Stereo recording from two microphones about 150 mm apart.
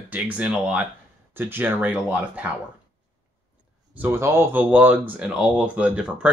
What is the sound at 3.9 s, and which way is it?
Speech, 15° right (ahead or behind).